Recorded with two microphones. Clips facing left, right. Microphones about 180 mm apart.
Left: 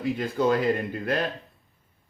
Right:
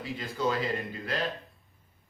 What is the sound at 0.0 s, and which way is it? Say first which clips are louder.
Speech: left 7 dB; 55° left (ahead or behind).